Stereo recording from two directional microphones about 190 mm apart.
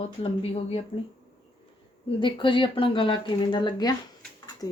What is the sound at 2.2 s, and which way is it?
Speech, 25° left (ahead or behind).